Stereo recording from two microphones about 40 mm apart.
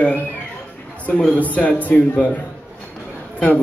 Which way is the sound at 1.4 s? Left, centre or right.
Left.